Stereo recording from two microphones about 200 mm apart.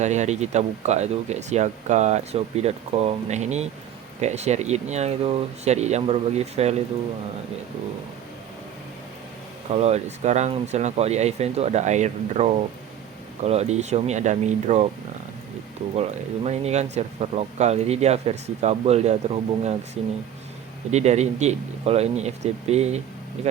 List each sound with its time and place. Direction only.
0.0 s speech: 35° right (ahead or behind)
9.6 s speech: 35° right (ahead or behind)
16.0 s speech: 30° right (ahead or behind)